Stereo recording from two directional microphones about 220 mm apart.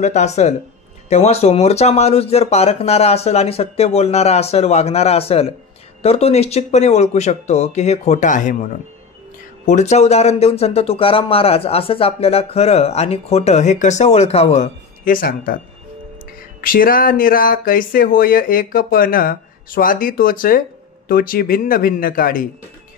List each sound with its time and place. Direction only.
0.0 s speech: 30° left (ahead or behind)
9.7 s speech: 30° left (ahead or behind)
16.6 s speech: 40° left (ahead or behind)